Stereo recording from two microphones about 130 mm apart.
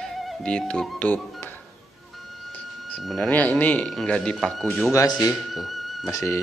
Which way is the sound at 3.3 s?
10° left (ahead or behind).